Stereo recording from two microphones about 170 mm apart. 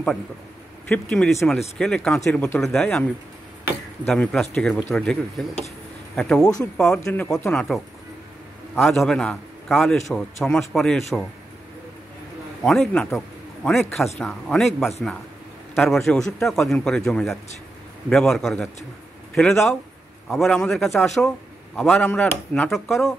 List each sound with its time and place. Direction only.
0.8 s speech: 5° left (ahead or behind)
4.1 s speech: 5° left (ahead or behind)
7.0 s speech: 15° left (ahead or behind)
8.8 s speech: centre (ahead or behind)
12.6 s a man's voice: centre (ahead or behind)